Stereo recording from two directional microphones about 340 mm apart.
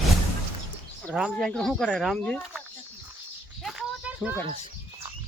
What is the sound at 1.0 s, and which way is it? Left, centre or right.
Speech, centre.